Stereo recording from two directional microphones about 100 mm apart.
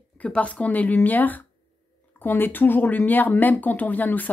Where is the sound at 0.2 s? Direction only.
15° left (ahead or behind).